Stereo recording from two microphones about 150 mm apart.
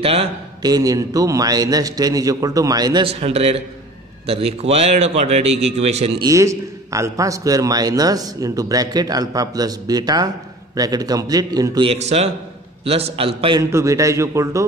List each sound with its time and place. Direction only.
0.0 s a man's voice: 40° right (ahead or behind)
0.6 s a man's voice: 25° right (ahead or behind)
3.1 s a man's voice: 40° right (ahead or behind)
6.2 s a man's voice: 20° right (ahead or behind); by 13.6 s 40° right (ahead or behind)
13.6 s a man's voice: 20° right (ahead or behind)